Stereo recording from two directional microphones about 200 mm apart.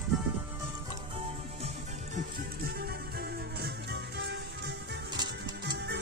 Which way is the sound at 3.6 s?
55° right (ahead or behind).